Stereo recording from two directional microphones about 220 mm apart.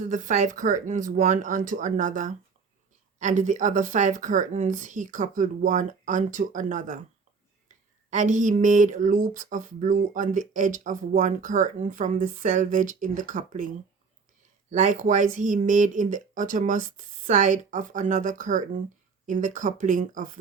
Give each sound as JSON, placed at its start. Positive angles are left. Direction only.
{"t": 0.0, "sound": "speech", "side_deg": -35}
{"t": 8.1, "sound": "speech", "side_deg": -35}
{"t": 14.7, "sound": "speech", "side_deg": -35}